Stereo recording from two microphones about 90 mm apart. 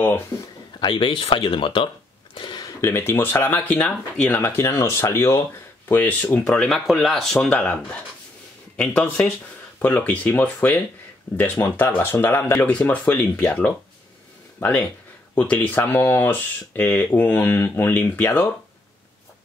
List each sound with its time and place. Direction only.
0.7 s speech: 65° left (ahead or behind)
2.3 s a sound: 55° left (ahead or behind)
2.8 s speech: 25° left (ahead or behind)
5.9 s speech: 20° left (ahead or behind); by 7.3 s centre (ahead or behind)
7.3 s speech: 20° left (ahead or behind)
12.5 s speech: 15° left (ahead or behind)
15.3 s speech: 15° left (ahead or behind)